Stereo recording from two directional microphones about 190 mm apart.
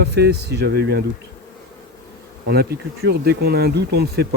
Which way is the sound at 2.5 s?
55° right (ahead or behind).